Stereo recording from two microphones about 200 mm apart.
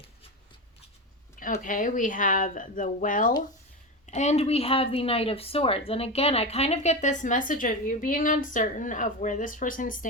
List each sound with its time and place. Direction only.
1.6 s a woman's voice: 40° left (ahead or behind)